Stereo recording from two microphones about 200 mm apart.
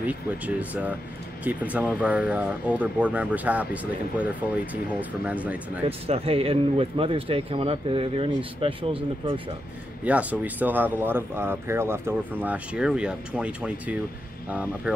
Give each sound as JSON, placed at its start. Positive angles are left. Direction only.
{"t": 0.0, "sound": "speech", "side_deg": -5}
{"t": 5.9, "sound": "speech", "side_deg": -30}
{"t": 10.0, "sound": "speech", "side_deg": -5}